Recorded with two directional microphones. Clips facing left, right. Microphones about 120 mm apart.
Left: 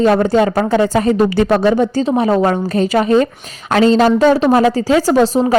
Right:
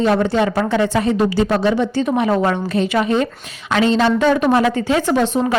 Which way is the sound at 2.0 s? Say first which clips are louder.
Left 3 dB; 30° left (ahead or behind).